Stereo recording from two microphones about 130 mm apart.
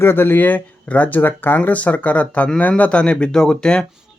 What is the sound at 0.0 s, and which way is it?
Speech, 15° left (ahead or behind).